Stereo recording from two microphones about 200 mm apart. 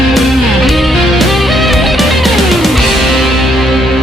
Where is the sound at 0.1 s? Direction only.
Centre (ahead or behind).